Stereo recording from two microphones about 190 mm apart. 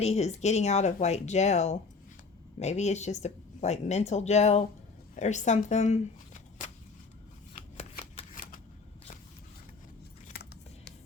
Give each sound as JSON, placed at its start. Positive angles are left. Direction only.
{"t": 0.0, "sound": "a woman's voice", "side_deg": 35}
{"t": 7.5, "sound": "shuffling cards", "side_deg": 35}